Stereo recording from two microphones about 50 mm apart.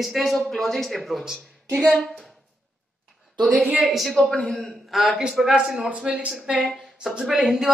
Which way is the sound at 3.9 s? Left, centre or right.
Centre.